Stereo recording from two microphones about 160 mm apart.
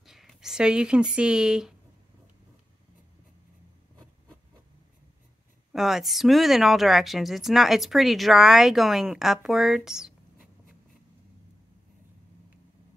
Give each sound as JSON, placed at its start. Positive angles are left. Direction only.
{"t": 0.0, "sound": "speech", "side_deg": 0}
{"t": 5.7, "sound": "speech", "side_deg": 0}